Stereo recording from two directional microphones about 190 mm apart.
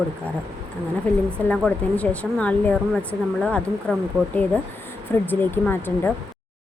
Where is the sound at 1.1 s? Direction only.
5° left (ahead or behind).